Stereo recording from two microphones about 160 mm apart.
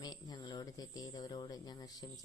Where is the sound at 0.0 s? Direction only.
25° left (ahead or behind).